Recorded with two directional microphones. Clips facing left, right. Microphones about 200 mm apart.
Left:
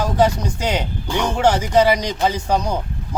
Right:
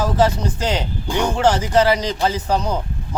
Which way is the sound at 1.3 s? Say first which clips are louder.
Left 1 dB; 10° left (ahead or behind).